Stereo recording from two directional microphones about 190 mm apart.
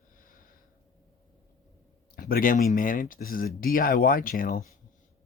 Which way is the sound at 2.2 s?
50° left (ahead or behind).